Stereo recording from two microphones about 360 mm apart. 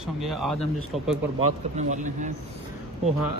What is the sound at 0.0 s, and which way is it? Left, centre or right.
Speech, centre.